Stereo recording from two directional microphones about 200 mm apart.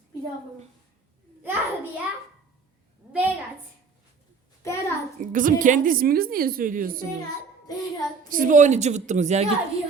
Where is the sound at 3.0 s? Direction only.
Centre (ahead or behind).